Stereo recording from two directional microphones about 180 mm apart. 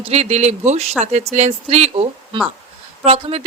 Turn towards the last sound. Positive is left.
turn(degrees=-35)  # may be behind; listen again after turning